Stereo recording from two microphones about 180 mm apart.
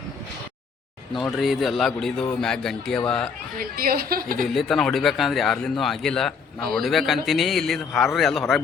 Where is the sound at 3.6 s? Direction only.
55° right (ahead or behind).